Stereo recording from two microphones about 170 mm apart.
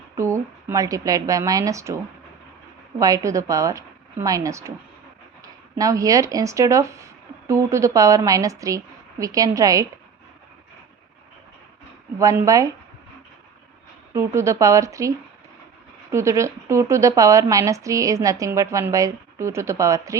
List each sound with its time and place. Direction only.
0.2 s a woman's voice: 20° right (ahead or behind)
3.0 s a woman's voice: 20° right (ahead or behind)
12.2 s a woman's voice: 20° right (ahead or behind)
14.1 s a woman's voice: 15° right (ahead or behind)
16.1 s a woman's voice: 15° right (ahead or behind)